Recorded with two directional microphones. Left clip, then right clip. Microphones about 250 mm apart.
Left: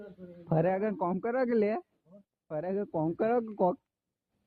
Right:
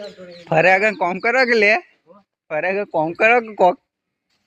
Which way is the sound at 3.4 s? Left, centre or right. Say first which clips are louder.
Right 14 dB; centre.